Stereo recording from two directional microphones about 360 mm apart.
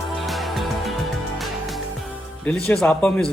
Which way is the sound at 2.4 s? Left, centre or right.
Centre.